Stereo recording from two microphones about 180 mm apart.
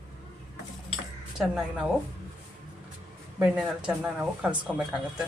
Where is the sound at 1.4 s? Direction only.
5° right (ahead or behind).